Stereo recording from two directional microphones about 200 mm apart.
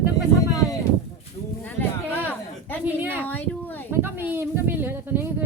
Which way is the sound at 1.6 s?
10° left (ahead or behind).